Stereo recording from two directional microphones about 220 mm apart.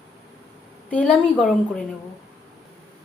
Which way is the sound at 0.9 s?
5° left (ahead or behind).